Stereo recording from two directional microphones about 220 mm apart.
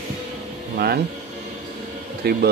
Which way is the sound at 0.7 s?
45° right (ahead or behind).